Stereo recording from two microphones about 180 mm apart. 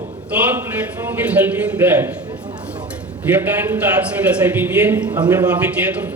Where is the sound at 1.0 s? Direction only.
10° right (ahead or behind).